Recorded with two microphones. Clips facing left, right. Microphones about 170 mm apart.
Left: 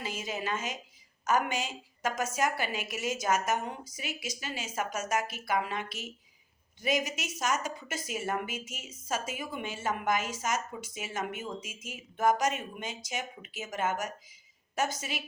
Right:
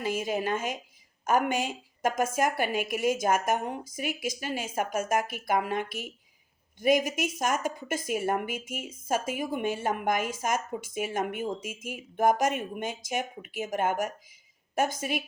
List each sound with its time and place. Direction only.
0.0 s a woman's voice: 55° right (ahead or behind)